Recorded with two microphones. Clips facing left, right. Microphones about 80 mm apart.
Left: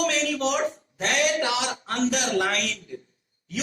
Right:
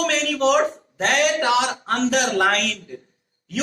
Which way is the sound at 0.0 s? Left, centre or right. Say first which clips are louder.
Right 4 dB; right.